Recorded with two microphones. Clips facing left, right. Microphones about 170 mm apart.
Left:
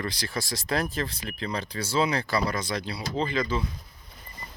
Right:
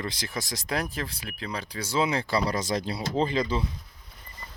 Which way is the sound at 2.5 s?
40° right (ahead or behind).